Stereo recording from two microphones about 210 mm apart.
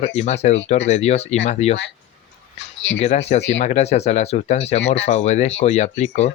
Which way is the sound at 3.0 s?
30° left (ahead or behind).